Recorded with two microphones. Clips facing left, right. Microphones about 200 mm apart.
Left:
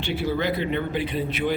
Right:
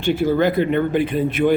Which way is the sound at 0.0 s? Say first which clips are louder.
Right 8 dB; 45° right (ahead or behind).